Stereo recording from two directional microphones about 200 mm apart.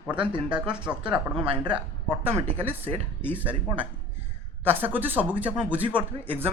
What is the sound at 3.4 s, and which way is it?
A woman's voice, 10° right (ahead or behind).